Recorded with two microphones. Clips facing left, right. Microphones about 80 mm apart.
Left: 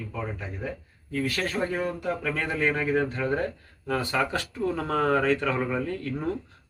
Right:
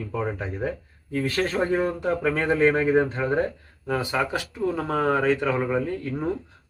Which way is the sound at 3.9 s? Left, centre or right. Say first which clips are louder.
Right 1 dB; centre.